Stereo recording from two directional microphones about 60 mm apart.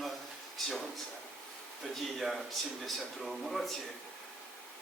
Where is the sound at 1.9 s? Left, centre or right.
Centre.